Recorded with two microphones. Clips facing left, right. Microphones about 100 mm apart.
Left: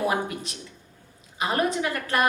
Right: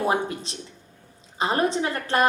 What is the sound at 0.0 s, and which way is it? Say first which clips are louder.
A woman's voice: right 2 dB; 30° right (ahead or behind).